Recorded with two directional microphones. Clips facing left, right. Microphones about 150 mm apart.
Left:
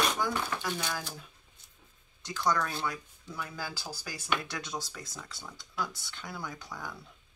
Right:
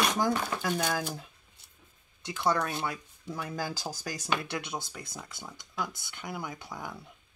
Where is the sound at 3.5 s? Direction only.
45° right (ahead or behind).